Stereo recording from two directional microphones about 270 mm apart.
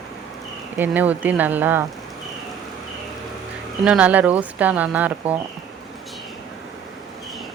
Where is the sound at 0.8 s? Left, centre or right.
Centre.